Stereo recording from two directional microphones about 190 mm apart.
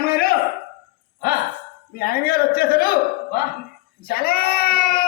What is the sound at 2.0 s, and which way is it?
A man's voice, 55° left (ahead or behind).